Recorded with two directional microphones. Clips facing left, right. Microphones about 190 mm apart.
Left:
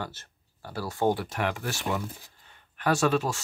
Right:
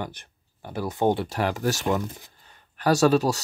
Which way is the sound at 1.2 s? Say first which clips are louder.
Right 5 dB; 35° right (ahead or behind).